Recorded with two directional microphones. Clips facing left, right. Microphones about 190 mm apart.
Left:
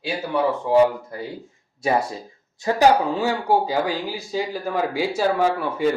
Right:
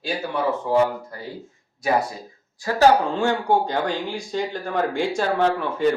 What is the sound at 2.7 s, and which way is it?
Speech, 20° left (ahead or behind).